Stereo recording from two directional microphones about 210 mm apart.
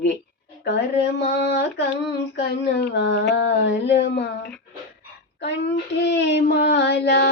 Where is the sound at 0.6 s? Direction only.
50° left (ahead or behind).